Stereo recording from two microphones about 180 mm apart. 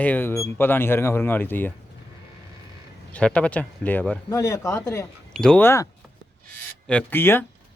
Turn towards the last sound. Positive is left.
turn(degrees=10)  # may be behind; listen again after turning